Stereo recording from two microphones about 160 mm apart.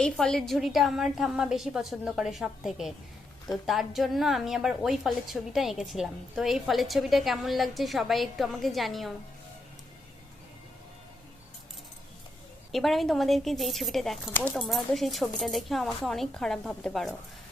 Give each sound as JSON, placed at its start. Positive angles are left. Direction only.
{"t": 0.0, "sound": "a woman's voice", "side_deg": 5}
{"t": 12.7, "sound": "a woman's voice", "side_deg": 0}